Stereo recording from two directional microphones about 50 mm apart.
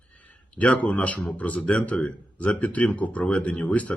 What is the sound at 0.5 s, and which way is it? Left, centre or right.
Speech, left.